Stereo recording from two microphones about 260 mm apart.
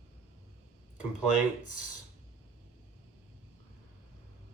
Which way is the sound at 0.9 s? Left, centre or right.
Left.